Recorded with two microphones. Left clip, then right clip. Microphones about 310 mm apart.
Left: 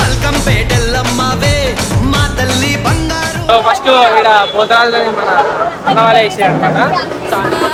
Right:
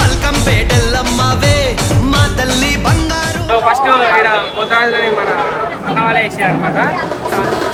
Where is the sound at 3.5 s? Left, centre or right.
Centre.